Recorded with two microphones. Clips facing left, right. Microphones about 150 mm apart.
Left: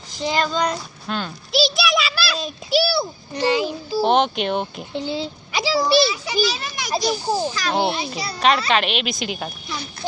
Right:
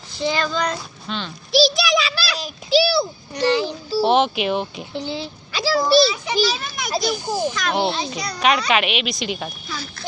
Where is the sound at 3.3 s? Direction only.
20° left (ahead or behind).